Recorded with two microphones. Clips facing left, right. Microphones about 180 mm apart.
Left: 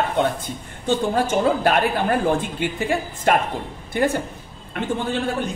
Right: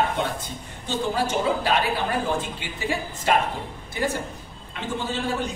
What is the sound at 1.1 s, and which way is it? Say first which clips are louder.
A woman's voice: left 2 dB; 50° left (ahead or behind).